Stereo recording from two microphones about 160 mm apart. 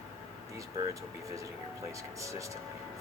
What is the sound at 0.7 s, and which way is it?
Speech, 20° right (ahead or behind).